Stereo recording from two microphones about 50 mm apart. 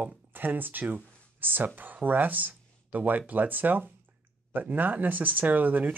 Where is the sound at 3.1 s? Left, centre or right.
Right.